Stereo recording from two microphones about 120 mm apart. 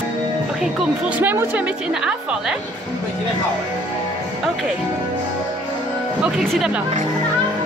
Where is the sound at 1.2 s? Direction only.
15° right (ahead or behind).